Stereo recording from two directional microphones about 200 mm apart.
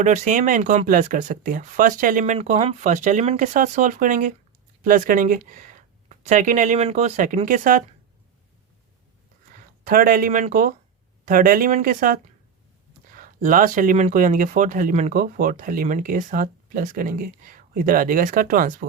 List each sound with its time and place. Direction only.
0.0 s speech: 40° right (ahead or behind)
9.8 s speech: 45° right (ahead or behind)